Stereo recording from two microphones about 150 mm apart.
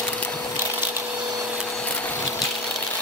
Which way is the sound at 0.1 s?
10° left (ahead or behind).